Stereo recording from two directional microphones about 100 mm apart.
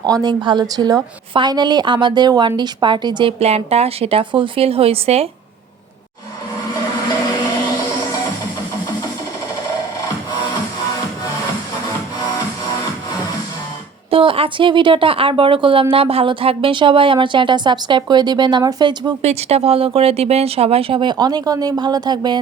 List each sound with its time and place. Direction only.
0.0 s a woman's voice: 40° right (ahead or behind)
1.3 s a woman's voice: 50° right (ahead or behind)
3.4 s a woman's voice: 90° right
14.1 s a woman's voice: 65° right (ahead or behind); by 19.1 s 45° right (ahead or behind)
19.2 s speech: 90° right; by 22.4 s 45° right (ahead or behind)